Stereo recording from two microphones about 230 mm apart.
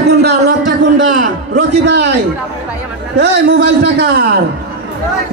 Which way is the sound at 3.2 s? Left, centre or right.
Right.